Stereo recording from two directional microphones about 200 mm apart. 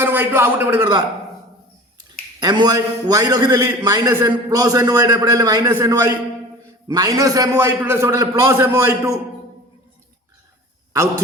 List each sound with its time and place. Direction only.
0.0 s a man's voice: 10° right (ahead or behind)
2.4 s a man's voice: 20° right (ahead or behind)